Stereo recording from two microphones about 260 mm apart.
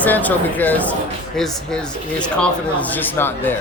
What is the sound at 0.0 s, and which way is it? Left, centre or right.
A man's voice, centre.